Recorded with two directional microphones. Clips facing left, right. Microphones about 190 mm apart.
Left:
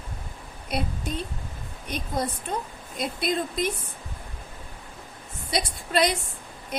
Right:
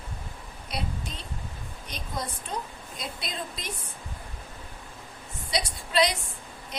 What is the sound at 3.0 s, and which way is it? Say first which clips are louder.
Speech: left 10 dB; 55° left (ahead or behind).